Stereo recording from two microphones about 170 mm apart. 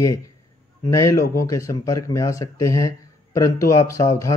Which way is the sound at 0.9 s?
20° left (ahead or behind).